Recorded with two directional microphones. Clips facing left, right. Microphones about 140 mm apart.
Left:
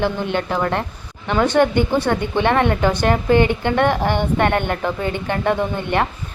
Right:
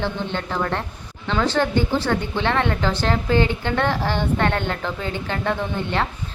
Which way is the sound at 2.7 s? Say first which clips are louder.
Left 5 dB; 15° left (ahead or behind).